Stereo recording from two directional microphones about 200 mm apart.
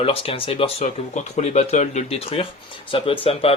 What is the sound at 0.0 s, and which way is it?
Speech, 30° left (ahead or behind).